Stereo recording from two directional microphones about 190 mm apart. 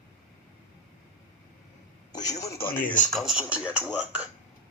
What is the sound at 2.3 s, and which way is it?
Speech, 15° left (ahead or behind).